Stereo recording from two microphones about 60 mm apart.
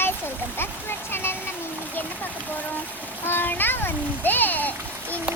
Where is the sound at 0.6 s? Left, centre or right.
Left.